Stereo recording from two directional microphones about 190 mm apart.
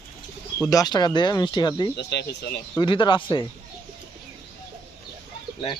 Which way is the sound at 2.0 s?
60° left (ahead or behind).